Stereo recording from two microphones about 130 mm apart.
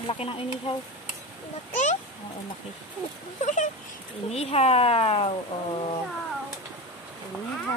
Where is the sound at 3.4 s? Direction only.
70° left (ahead or behind).